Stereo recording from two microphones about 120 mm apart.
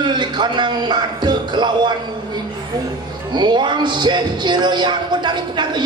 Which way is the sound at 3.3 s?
40° right (ahead or behind).